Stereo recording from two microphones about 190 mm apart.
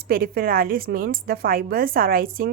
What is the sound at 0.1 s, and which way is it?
A woman's voice, 50° right (ahead or behind).